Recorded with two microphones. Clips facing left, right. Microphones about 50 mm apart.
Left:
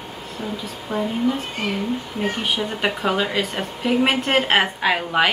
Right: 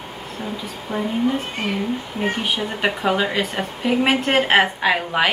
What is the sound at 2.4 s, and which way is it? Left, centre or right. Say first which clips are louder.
A woman's voice: right 1 dB; centre.